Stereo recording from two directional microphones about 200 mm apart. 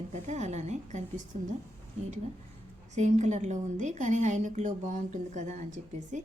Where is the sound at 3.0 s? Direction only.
35° right (ahead or behind).